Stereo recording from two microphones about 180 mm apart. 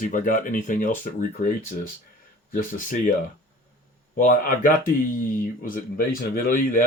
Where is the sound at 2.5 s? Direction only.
45° left (ahead or behind).